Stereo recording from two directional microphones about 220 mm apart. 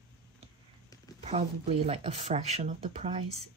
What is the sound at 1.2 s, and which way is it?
Speech, 30° right (ahead or behind).